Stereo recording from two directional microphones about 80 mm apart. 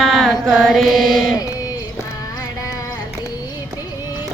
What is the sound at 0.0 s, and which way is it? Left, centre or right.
Mantra, centre.